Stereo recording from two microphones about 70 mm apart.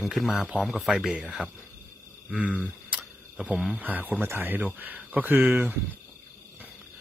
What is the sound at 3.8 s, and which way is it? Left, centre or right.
Speech, right.